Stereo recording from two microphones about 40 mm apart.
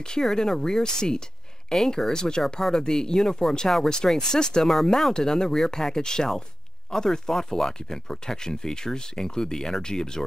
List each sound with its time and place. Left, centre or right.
0.2 s speech: centre
5.1 s speech: centre